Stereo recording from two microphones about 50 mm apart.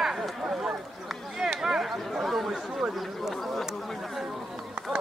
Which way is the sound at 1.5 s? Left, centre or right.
Centre.